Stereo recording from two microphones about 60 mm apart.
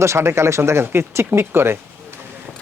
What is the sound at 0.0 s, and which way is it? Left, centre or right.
Speech, right.